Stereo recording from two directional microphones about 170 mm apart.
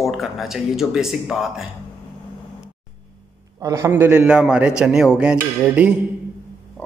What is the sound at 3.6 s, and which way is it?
Speech, 15° right (ahead or behind).